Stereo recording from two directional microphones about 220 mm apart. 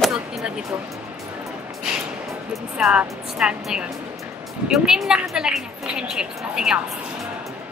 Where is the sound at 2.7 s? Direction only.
5° right (ahead or behind).